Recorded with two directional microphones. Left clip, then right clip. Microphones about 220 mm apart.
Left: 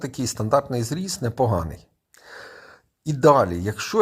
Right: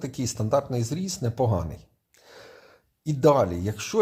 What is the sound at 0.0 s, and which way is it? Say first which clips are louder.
Speech: left 3 dB; 25° left (ahead or behind).